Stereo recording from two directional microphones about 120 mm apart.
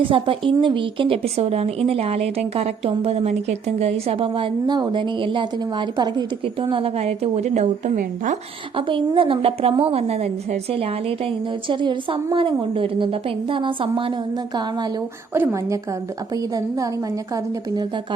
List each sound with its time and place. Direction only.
0.0 s a woman's voice: 45° right (ahead or behind); by 7.7 s 70° right (ahead or behind)
8.7 s a woman's voice: 45° right (ahead or behind)
11.3 s a woman's voice: 40° right (ahead or behind)
15.3 s a woman's voice: 25° right (ahead or behind)